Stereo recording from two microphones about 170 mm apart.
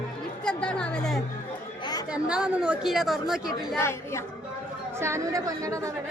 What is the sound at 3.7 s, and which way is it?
Speech, 15° left (ahead or behind).